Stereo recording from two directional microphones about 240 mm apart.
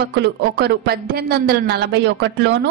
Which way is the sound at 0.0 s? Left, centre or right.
Right.